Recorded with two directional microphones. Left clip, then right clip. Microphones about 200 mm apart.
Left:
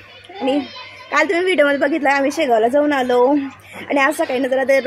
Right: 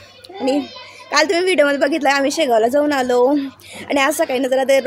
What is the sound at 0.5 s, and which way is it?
Speech, 55° right (ahead or behind).